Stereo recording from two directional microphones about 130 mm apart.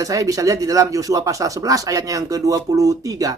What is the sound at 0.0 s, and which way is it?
Speech, 25° right (ahead or behind).